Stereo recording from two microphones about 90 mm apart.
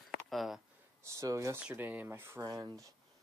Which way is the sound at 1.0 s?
35° right (ahead or behind).